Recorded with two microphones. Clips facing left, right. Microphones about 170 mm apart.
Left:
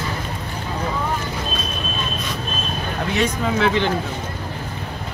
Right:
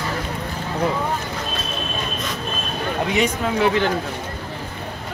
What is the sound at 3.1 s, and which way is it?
Speech, 5° right (ahead or behind).